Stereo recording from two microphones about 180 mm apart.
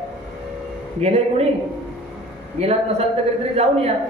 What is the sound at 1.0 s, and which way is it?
Speech, 35° right (ahead or behind).